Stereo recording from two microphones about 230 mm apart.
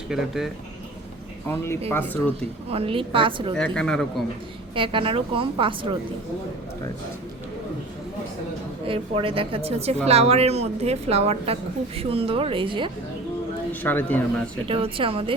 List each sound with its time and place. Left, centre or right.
0.1 s speech: centre
1.5 s speech: centre
2.6 s a woman's voice: right
3.5 s speech: centre
4.7 s a woman's voice: right
8.9 s a woman's voice: right
13.8 s speech: centre
14.7 s a woman's voice: right